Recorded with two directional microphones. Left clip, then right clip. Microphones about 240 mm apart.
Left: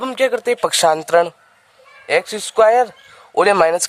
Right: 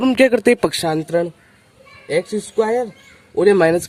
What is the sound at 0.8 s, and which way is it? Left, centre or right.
Speech, left.